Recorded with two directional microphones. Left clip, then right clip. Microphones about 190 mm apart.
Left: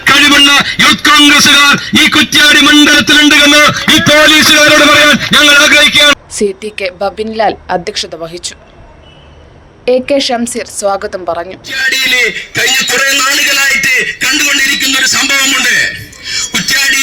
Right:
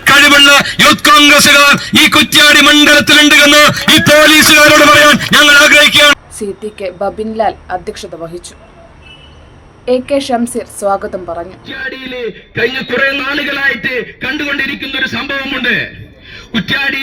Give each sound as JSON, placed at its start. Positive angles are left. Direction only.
{"t": 0.3, "sound": "a sound", "side_deg": 0}
{"t": 1.2, "sound": "a man's voice", "side_deg": 0}
{"t": 6.3, "sound": "a woman's voice", "side_deg": 40}
{"t": 9.8, "sound": "a woman's voice", "side_deg": 45}